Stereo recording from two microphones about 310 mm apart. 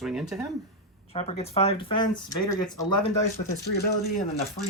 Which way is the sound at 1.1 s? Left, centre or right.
Left.